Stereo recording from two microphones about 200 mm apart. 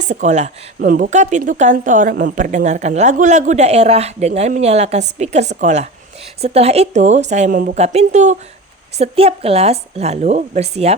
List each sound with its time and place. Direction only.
0.0 s speech: 35° right (ahead or behind)